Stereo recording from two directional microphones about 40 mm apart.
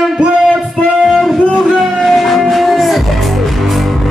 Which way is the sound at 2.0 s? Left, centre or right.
Centre.